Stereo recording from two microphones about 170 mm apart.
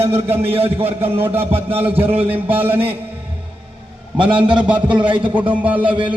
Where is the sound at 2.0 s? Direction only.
35° right (ahead or behind).